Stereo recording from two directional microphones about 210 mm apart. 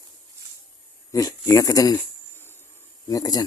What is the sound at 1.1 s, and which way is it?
Speech, 15° left (ahead or behind).